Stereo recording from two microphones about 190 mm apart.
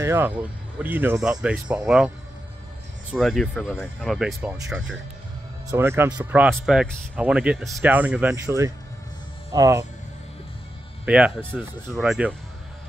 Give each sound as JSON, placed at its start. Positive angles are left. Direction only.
{"t": 0.0, "sound": "speech", "side_deg": -15}
{"t": 6.5, "sound": "speech", "side_deg": 0}
{"t": 11.1, "sound": "speech", "side_deg": -5}